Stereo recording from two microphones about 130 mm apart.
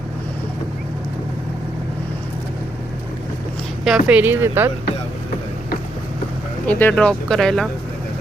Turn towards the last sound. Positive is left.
turn(degrees=5)  # may be behind; listen again after turning